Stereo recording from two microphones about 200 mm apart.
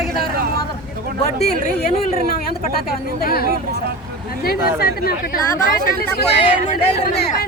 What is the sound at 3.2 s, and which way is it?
Speech, 50° left (ahead or behind).